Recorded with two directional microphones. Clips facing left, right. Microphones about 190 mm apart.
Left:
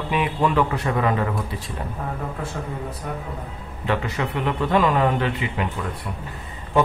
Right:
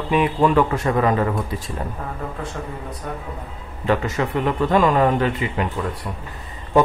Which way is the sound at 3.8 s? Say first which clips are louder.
Right 4 dB; 45° right (ahead or behind).